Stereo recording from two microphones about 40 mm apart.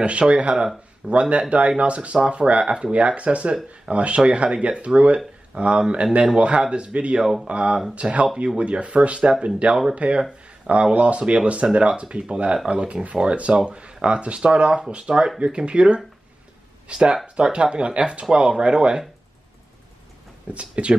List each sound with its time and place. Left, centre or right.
0.0 s speech: right
2.6 s speech: right
2.9 s speech: right
20.5 s speech: right